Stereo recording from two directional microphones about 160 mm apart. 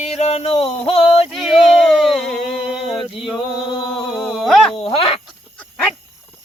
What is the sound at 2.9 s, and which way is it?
Male singing, centre (ahead or behind).